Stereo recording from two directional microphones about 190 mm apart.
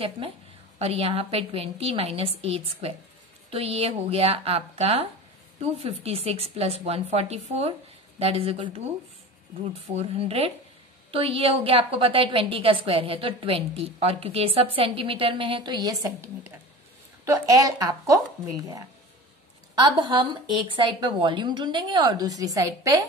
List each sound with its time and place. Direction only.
0.7 s a woman's voice: 30° right (ahead or behind)
19.7 s a woman's voice: 20° right (ahead or behind)